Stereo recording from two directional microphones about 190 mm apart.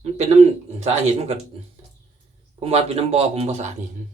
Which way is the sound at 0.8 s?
35° right (ahead or behind).